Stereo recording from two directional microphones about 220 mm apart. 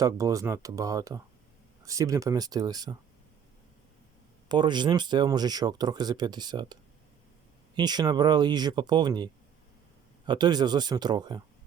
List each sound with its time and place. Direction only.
0.0 s speech: 15° right (ahead or behind)
4.4 s speech: 20° right (ahead or behind)
7.8 s speech: 20° right (ahead or behind)